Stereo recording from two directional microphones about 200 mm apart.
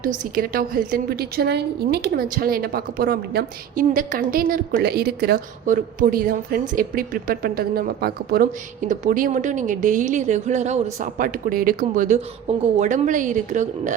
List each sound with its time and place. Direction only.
0.3 s a woman's voice: 45° right (ahead or behind)